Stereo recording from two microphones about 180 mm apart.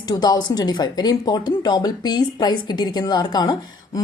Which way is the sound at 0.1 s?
25° left (ahead or behind).